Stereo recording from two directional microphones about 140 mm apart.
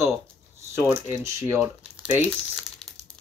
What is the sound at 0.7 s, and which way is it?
Speech, 20° right (ahead or behind).